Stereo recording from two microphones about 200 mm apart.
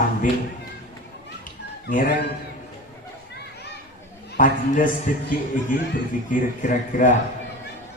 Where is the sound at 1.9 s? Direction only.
45° left (ahead or behind).